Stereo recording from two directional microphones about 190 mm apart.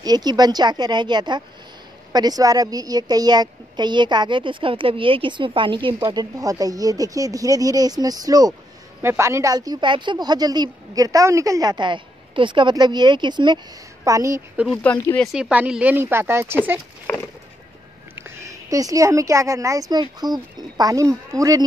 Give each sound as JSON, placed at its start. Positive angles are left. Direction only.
{"t": 0.0, "sound": "a woman's voice", "side_deg": -20}
{"t": 14.6, "sound": "speech", "side_deg": 5}
{"t": 15.3, "sound": "speech", "side_deg": -5}
{"t": 18.1, "sound": "speech", "side_deg": -15}